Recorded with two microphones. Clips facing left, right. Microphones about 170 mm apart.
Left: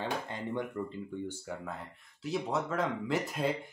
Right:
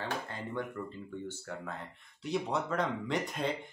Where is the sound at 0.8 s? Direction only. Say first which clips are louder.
Left 3 dB; 20° left (ahead or behind).